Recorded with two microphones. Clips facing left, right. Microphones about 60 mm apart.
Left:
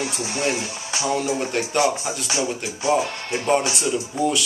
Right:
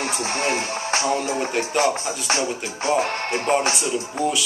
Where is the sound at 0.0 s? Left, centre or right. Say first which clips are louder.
Right 1 dB; right.